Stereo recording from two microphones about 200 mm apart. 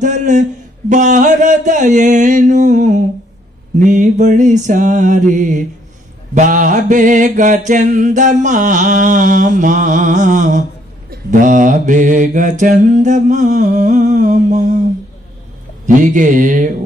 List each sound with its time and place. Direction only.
0.0 s mantra: 40° right (ahead or behind)
15.9 s mantra: 40° right (ahead or behind)